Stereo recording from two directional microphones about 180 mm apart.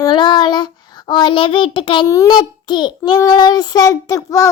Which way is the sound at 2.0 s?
20° left (ahead or behind).